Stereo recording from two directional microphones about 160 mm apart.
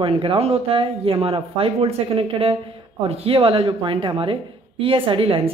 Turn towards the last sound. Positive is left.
turn(degrees=-35)  # may be behind; listen again after turning